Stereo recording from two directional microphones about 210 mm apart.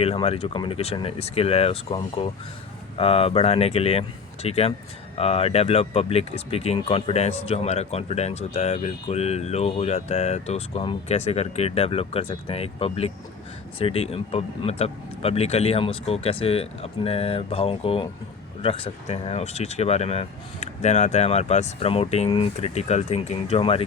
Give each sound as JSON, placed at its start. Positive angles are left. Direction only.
{"t": 0.0, "sound": "speech", "side_deg": 30}